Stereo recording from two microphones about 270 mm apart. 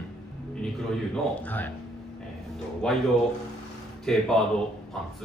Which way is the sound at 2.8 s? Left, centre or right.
Centre.